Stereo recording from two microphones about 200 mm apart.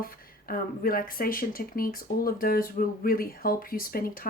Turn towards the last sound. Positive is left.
turn(degrees=45)  # may be behind; listen again after turning